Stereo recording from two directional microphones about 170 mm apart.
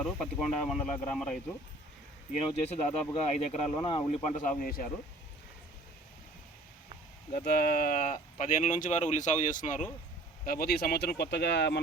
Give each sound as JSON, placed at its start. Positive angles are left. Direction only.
{"t": 0.0, "sound": "speech", "side_deg": 0}
{"t": 2.5, "sound": "speech", "side_deg": 40}
{"t": 3.8, "sound": "speech", "side_deg": 25}
{"t": 4.1, "sound": "speech", "side_deg": 45}
{"t": 7.3, "sound": "speech", "side_deg": 60}
{"t": 10.4, "sound": "speech", "side_deg": 60}